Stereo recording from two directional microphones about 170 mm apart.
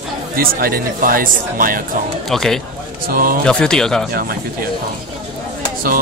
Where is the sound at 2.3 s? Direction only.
Centre (ahead or behind).